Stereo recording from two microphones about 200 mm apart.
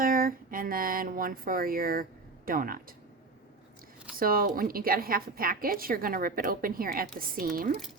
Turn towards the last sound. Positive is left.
turn(degrees=-45)  # may be behind; listen again after turning